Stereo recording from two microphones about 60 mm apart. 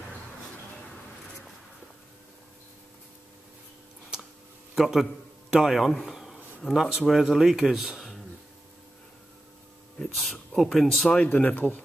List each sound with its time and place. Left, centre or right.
4.7 s a man's voice: centre
6.1 s a sound: centre
6.6 s speech: centre
10.1 s speech: centre
11.2 s speech: left